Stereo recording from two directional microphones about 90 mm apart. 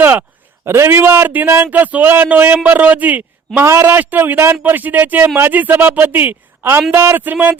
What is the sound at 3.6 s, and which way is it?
Speech, 30° right (ahead or behind).